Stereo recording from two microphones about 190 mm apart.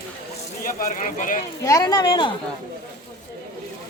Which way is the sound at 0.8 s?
45° left (ahead or behind).